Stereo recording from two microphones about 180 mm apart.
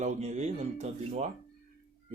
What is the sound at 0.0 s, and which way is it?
Speech, 40° right (ahead or behind).